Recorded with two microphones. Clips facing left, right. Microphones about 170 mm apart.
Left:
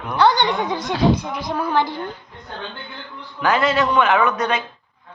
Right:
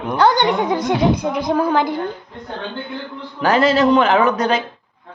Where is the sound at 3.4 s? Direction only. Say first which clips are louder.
Right 4 dB; 35° right (ahead or behind).